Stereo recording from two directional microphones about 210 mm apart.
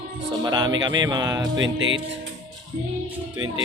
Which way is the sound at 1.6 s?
65° right (ahead or behind).